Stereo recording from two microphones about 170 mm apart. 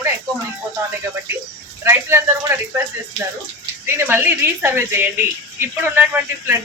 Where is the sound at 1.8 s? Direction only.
15° right (ahead or behind).